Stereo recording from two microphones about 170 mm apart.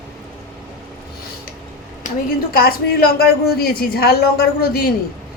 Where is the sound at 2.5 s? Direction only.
60° left (ahead or behind).